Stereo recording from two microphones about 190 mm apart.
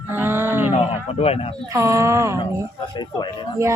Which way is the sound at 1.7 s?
15° right (ahead or behind).